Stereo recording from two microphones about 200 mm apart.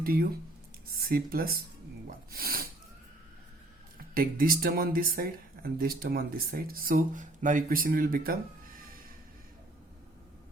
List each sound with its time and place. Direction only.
0.0 s speech: 50° right (ahead or behind)
3.9 s speech: 45° right (ahead or behind)